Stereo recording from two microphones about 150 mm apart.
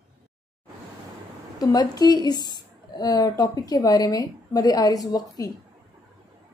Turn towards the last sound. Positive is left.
turn(degrees=25)  # may be behind; listen again after turning